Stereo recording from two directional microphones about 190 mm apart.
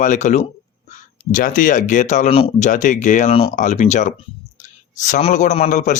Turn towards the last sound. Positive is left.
turn(degrees=40)  # may be behind; listen again after turning